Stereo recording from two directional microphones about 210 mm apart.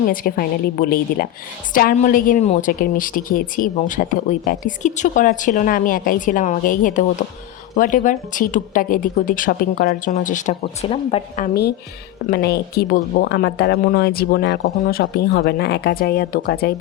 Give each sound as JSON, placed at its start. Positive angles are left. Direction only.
{"t": 0.1, "sound": "speech", "side_deg": 40}
{"t": 11.4, "sound": "speech", "side_deg": 50}